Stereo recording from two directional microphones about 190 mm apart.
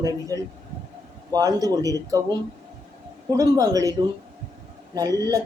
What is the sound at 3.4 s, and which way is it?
A man's voice, 20° right (ahead or behind).